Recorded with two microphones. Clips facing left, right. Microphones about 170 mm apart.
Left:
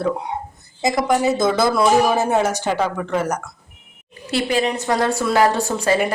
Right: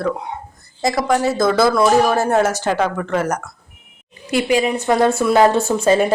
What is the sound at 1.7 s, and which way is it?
Speech, 5° left (ahead or behind).